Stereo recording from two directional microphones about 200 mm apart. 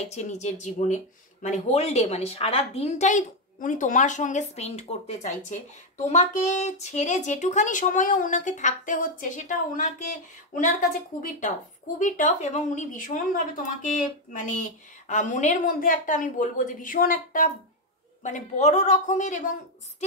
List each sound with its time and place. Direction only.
0.0 s speech: 35° left (ahead or behind)
11.2 s speech: 40° left (ahead or behind)